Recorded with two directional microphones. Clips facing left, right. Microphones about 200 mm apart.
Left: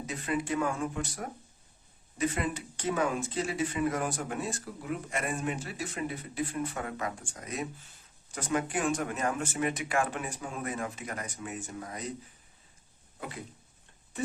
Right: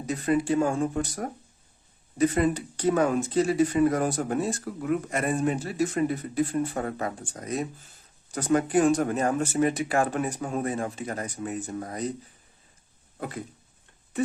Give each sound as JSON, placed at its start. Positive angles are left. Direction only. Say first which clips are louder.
{"t": 0.0, "sound": "speech", "louder": "right 8 dB", "side_deg": -40}
{"t": 4.6, "sound": "speech", "louder": "right 9 dB", "side_deg": -55}